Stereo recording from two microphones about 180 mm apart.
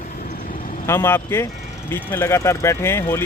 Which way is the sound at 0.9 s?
10° left (ahead or behind).